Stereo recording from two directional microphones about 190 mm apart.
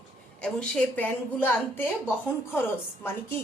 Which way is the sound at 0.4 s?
5° left (ahead or behind).